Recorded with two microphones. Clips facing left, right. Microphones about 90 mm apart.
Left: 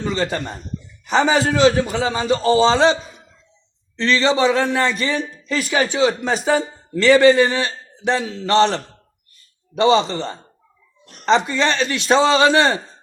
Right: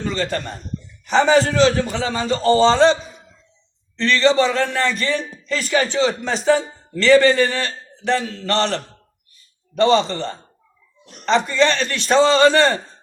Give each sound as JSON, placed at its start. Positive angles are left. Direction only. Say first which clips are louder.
{"t": 0.0, "sound": "a man's voice", "louder": "left 1 dB", "side_deg": 15}